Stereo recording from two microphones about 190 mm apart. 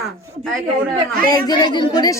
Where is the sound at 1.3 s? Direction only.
20° left (ahead or behind).